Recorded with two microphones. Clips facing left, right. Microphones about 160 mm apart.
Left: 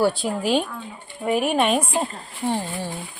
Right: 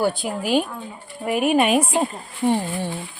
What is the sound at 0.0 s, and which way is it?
A woman's voice, centre (ahead or behind).